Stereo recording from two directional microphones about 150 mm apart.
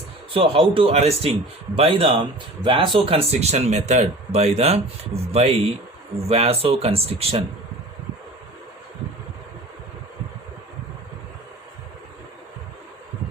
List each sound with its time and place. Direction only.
0.3 s speech: 35° right (ahead or behind)